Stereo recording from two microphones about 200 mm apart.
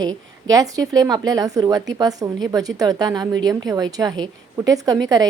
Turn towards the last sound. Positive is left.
turn(degrees=-20)  # may be behind; listen again after turning